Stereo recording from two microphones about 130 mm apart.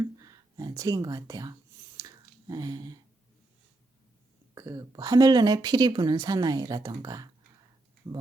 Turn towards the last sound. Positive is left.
turn(degrees=-30)  # may be behind; listen again after turning